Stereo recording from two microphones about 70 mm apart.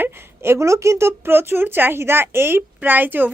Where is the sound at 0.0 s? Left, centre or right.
Right.